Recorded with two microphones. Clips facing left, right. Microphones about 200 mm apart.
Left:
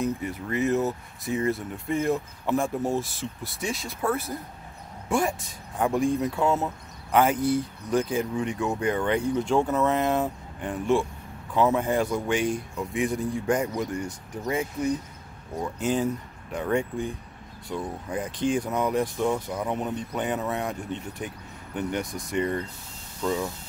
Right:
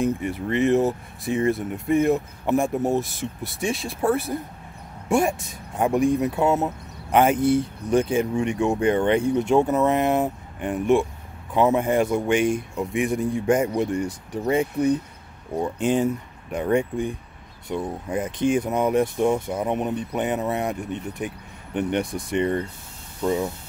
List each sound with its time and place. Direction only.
0.0 s speech: 30° right (ahead or behind)
5.8 s speech: 20° right (ahead or behind)
21.7 s speech: 30° right (ahead or behind)